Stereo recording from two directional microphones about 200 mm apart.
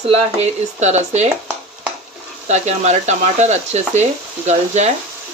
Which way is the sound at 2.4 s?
35° right (ahead or behind).